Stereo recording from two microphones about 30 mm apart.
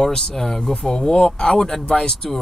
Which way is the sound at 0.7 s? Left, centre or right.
Left.